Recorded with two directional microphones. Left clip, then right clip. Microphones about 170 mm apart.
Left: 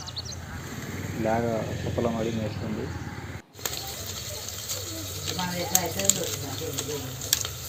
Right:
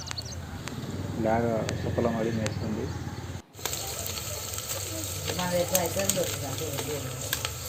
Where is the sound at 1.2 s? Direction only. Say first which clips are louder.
Even; centre (ahead or behind).